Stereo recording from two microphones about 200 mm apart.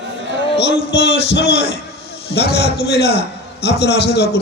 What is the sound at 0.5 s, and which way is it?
Speech, 60° left (ahead or behind).